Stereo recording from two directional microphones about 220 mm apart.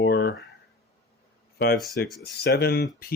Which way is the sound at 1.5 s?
45° left (ahead or behind).